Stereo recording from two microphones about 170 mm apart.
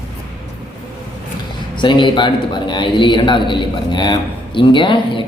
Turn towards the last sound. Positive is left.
turn(degrees=30)  # may be behind; listen again after turning